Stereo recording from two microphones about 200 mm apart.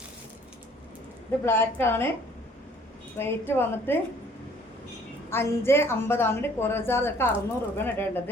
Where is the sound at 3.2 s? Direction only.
10° left (ahead or behind).